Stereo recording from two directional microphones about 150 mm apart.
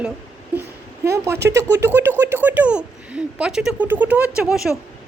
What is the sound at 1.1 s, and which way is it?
Speech, 15° right (ahead or behind).